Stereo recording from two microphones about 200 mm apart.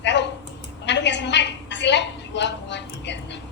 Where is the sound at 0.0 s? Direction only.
60° left (ahead or behind).